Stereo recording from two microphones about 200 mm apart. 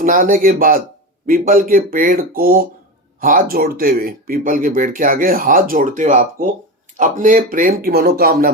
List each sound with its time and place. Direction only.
0.0 s speech: 40° right (ahead or behind)